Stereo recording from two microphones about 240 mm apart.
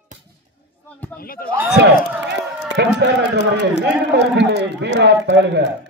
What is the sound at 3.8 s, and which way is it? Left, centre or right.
A man's voice, right.